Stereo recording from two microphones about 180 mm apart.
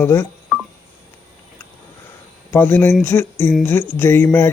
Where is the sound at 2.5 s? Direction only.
10° left (ahead or behind).